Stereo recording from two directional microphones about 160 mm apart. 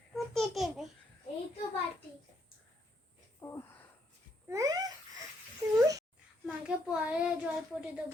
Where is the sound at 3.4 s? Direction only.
15° left (ahead or behind).